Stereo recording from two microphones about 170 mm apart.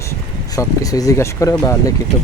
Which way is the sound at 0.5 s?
20° left (ahead or behind).